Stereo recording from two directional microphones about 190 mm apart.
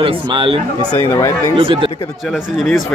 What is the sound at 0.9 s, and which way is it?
Speech, 15° left (ahead or behind).